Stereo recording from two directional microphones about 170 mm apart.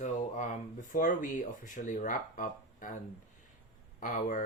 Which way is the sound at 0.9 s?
50° left (ahead or behind).